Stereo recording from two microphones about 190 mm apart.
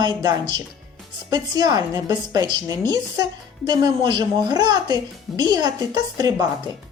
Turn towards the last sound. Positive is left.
turn(degrees=-20)  # may be behind; listen again after turning